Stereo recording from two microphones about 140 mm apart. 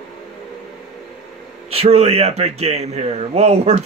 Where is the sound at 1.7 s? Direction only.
45° right (ahead or behind).